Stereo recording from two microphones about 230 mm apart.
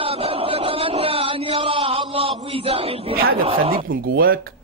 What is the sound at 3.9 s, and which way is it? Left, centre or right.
Speech, right.